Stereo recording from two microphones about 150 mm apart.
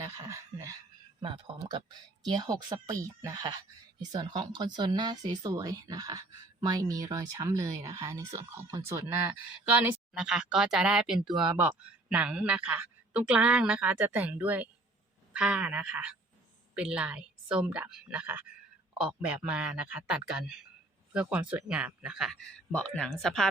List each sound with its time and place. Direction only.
0.0 s speech: 20° right (ahead or behind)
1.2 s a man's voice: 40° right (ahead or behind); by 22.4 s 5° right (ahead or behind)
22.7 s speech: 5° left (ahead or behind)